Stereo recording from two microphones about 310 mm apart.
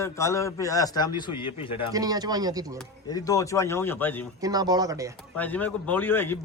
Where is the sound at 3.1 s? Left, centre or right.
Centre.